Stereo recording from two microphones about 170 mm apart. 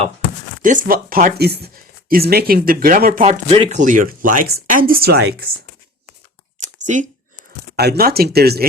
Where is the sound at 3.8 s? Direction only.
50° right (ahead or behind); by 5.5 s 65° right (ahead or behind).